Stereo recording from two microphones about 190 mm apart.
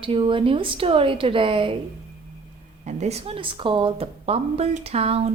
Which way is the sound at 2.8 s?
35° right (ahead or behind).